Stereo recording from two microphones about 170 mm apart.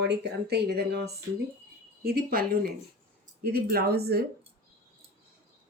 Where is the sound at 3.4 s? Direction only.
65° right (ahead or behind).